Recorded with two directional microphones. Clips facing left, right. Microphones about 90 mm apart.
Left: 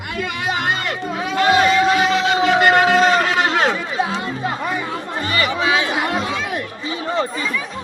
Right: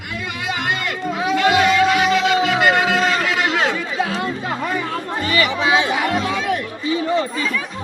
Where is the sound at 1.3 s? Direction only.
40° left (ahead or behind).